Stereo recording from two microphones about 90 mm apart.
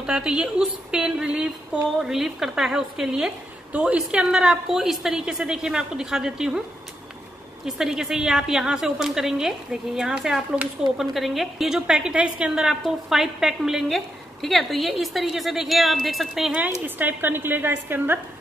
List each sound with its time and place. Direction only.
0.0 s a woman's voice: 10° right (ahead or behind)
7.6 s a woman's voice: 5° right (ahead or behind)
16.5 s a woman's voice: 20° right (ahead or behind)